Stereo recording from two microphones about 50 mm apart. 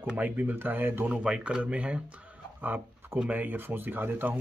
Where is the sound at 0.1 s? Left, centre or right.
Right.